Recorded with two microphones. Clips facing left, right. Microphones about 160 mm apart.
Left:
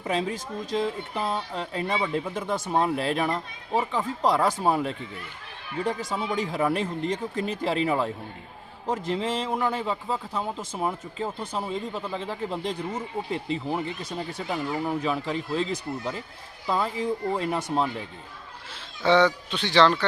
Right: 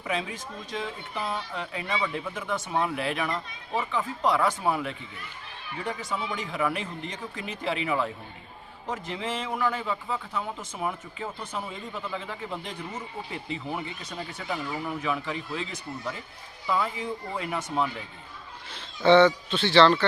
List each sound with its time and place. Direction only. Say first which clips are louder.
0.0 s speech: left 4 dB; 35° left (ahead or behind)
18.7 s speech: right 3 dB; 10° left (ahead or behind)